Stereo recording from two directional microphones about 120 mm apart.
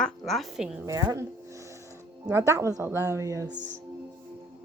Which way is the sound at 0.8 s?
30° right (ahead or behind).